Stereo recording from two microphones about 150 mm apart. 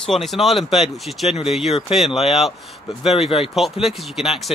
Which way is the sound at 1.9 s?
40° left (ahead or behind).